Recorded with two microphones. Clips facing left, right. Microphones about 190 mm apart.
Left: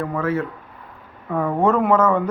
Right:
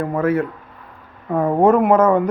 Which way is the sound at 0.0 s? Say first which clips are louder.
Right 4 dB; 40° right (ahead or behind).